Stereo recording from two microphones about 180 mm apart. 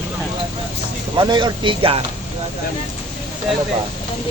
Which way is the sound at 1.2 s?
25° right (ahead or behind).